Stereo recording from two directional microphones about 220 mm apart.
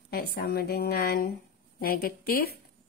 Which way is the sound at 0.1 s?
45° left (ahead or behind).